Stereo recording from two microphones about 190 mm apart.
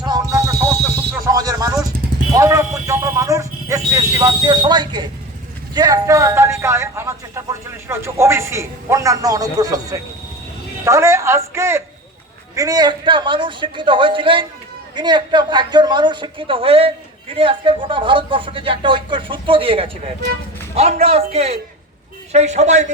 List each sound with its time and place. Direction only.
0.0 s music: 20° right (ahead or behind)
1.2 s a sound: 20° right (ahead or behind)
5.7 s a man's voice: 20° right (ahead or behind); by 22.9 s 35° right (ahead or behind)